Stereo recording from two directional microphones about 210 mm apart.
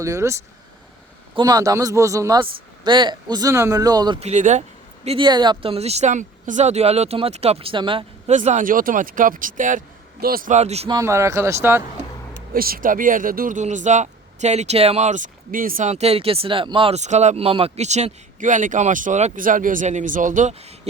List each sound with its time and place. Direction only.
0.0 s speech: 15° right (ahead or behind)
1.4 s speech: 20° right (ahead or behind); by 4.6 s 35° right (ahead or behind)
5.0 s speech: 25° right (ahead or behind)
8.4 s speech: 35° right (ahead or behind)
10.9 s speech: 15° right (ahead or behind)
12.5 s speech: 45° right (ahead or behind)